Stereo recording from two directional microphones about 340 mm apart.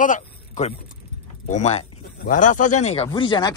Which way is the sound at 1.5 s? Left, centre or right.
Centre.